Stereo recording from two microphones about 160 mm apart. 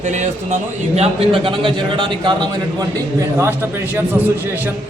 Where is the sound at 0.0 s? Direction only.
50° right (ahead or behind); by 4.7 s 15° right (ahead or behind).